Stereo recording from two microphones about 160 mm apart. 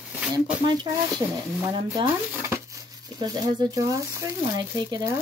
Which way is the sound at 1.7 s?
30° right (ahead or behind).